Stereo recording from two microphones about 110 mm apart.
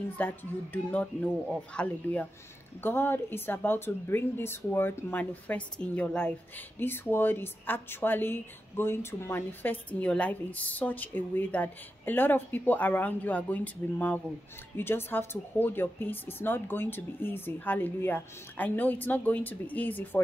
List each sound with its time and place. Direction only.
0.2 s speech: 15° left (ahead or behind)
1.5 s speech: 10° left (ahead or behind)
2.8 s a woman's voice: 20° left (ahead or behind)